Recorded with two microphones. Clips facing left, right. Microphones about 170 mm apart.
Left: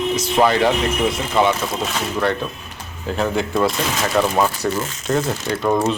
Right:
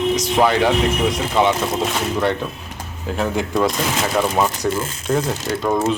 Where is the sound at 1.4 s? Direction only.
20° right (ahead or behind).